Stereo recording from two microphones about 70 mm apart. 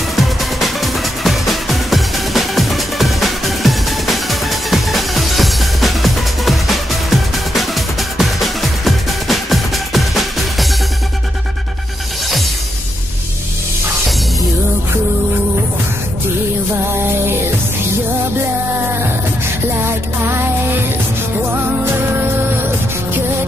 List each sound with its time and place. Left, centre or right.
0.1 s music: centre